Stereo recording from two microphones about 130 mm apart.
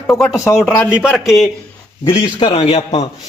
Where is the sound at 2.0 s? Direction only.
40° left (ahead or behind).